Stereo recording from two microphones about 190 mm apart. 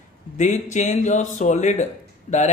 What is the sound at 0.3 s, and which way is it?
A man's voice, 40° left (ahead or behind).